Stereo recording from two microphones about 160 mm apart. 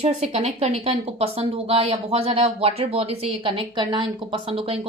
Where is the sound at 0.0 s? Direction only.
45° right (ahead or behind).